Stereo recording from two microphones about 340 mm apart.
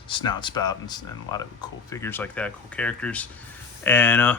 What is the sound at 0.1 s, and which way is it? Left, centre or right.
Speech, centre.